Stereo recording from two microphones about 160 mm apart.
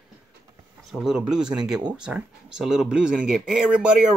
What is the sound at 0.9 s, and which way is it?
Speech, 5° right (ahead or behind).